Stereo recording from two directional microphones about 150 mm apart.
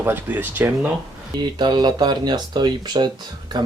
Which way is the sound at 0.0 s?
15° right (ahead or behind).